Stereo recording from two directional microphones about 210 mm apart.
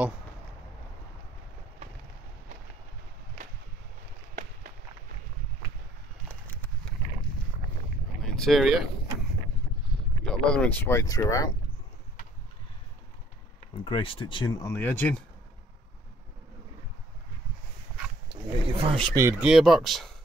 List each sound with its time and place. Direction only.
6.2 s a sound: 5° left (ahead or behind)
8.2 s boat: centre (ahead or behind)
9.8 s speech: 5° left (ahead or behind)
13.8 s speech: 25° left (ahead or behind)
18.7 s a sound: 25° right (ahead or behind)
19.1 s speech: 10° right (ahead or behind)